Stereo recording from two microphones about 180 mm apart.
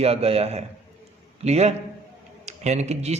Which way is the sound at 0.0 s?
35° right (ahead or behind).